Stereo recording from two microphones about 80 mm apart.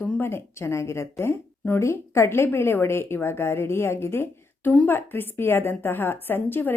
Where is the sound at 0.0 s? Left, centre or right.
Centre.